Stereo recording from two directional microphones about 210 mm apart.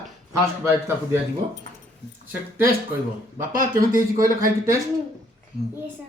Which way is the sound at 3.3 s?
40° right (ahead or behind).